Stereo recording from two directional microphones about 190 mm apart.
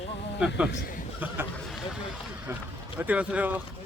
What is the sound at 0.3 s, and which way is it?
Speech, 5° right (ahead or behind).